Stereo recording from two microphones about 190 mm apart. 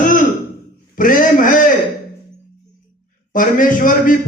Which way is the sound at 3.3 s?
45° left (ahead or behind).